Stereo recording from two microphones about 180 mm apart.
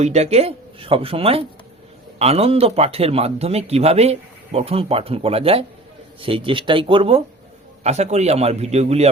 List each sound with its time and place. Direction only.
0.0 s speech: 35° right (ahead or behind)